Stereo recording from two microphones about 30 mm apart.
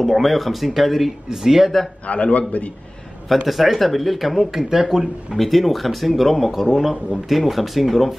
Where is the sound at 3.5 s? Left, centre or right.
Centre.